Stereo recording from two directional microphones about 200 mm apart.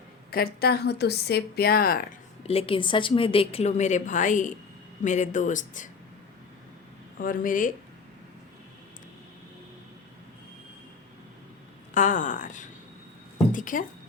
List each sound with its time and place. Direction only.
0.3 s a woman's voice: 50° left (ahead or behind)
2.5 s a woman's voice: 30° left (ahead or behind)
7.2 s speech: 45° left (ahead or behind)
11.9 s speech: 40° left (ahead or behind)